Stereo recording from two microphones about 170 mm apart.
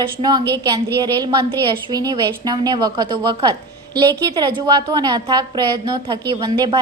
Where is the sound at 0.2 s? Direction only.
25° right (ahead or behind).